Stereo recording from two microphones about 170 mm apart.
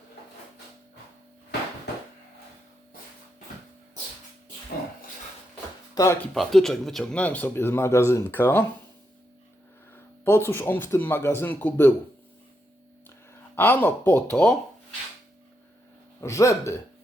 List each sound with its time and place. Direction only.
5.9 s speech: 20° left (ahead or behind)
6.3 s a man's voice: centre (ahead or behind)
10.2 s a man's voice: 15° left (ahead or behind)
13.6 s a man's voice: 10° left (ahead or behind)
16.2 s a man's voice: 20° left (ahead or behind)